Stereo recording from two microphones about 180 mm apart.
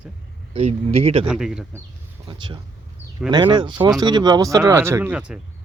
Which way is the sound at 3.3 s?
25° right (ahead or behind).